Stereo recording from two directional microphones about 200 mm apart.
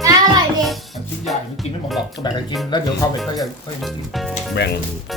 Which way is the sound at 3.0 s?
20° left (ahead or behind).